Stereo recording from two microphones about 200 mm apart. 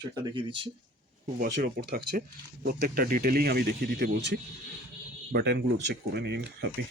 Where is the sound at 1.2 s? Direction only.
50° right (ahead or behind).